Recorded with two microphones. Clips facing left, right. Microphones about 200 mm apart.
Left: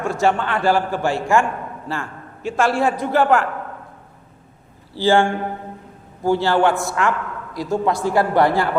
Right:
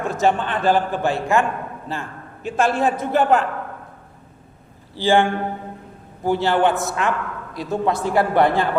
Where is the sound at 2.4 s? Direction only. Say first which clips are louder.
Left 1 dB; 20° right (ahead or behind).